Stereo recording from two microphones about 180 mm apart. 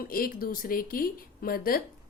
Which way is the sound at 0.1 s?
55° left (ahead or behind).